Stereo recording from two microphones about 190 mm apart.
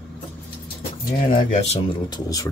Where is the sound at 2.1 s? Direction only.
20° left (ahead or behind).